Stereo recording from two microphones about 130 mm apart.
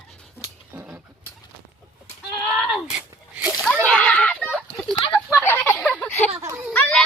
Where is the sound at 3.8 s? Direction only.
10° left (ahead or behind).